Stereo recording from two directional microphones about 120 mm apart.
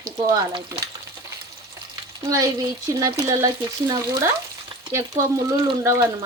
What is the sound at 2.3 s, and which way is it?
Speech, 25° right (ahead or behind).